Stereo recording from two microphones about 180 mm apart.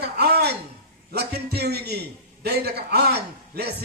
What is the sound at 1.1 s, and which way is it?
A man's voice, 65° right (ahead or behind).